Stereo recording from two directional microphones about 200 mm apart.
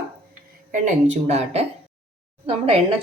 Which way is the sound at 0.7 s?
35° right (ahead or behind).